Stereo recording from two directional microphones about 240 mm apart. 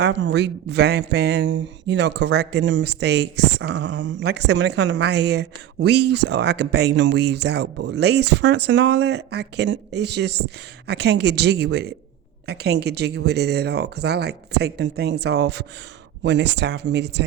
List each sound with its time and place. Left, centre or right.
0.0 s speech: right